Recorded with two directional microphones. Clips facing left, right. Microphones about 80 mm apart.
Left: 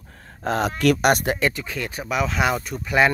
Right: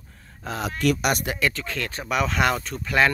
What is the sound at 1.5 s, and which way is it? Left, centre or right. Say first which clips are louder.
Speech: left 1 dB; centre.